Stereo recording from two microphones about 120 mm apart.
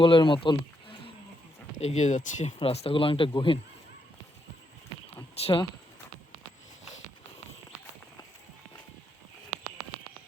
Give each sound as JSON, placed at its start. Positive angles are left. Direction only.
{"t": 0.0, "sound": "speech", "side_deg": 45}
{"t": 1.8, "sound": "speech", "side_deg": 70}
{"t": 2.6, "sound": "speech", "side_deg": 55}
{"t": 5.4, "sound": "speech", "side_deg": 50}